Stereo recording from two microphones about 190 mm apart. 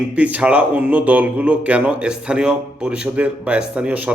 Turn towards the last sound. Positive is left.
turn(degrees=-5)  # may be behind; listen again after turning